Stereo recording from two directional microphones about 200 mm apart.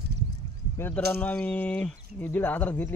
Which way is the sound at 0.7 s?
10° left (ahead or behind).